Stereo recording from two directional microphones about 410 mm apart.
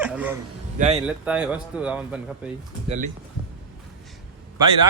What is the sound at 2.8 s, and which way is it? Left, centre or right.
Speech, centre.